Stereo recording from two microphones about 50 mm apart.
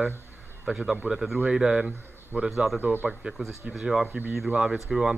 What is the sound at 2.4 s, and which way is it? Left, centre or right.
Speech, centre.